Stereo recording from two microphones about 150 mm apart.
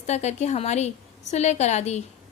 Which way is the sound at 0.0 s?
50° left (ahead or behind).